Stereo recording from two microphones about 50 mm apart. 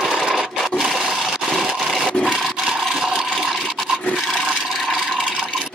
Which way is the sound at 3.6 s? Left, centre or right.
Centre.